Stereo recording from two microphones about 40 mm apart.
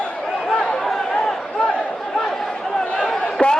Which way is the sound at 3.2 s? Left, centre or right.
Left.